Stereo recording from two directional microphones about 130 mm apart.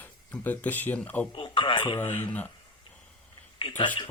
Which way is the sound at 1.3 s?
40° left (ahead or behind).